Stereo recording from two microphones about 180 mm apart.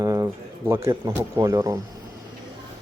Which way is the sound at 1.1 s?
15° right (ahead or behind).